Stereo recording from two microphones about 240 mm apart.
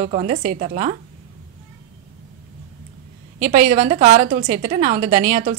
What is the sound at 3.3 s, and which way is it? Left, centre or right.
A woman's voice, right.